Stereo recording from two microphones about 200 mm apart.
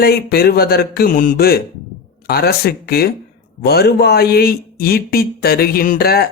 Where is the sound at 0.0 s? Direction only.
50° left (ahead or behind).